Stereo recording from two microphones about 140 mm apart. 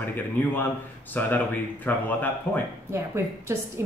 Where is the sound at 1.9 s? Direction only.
15° left (ahead or behind).